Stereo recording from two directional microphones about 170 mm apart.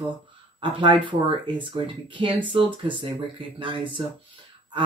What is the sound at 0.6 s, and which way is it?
Speech, 30° right (ahead or behind).